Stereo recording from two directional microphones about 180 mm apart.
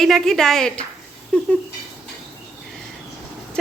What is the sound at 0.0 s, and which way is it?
Speech, centre (ahead or behind).